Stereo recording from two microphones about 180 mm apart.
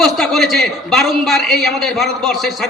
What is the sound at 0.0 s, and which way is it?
A man's voice, centre (ahead or behind).